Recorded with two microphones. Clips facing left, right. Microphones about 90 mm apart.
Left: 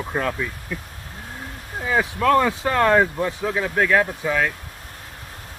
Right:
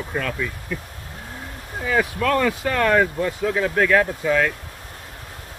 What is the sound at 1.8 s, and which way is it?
Speech, 15° left (ahead or behind).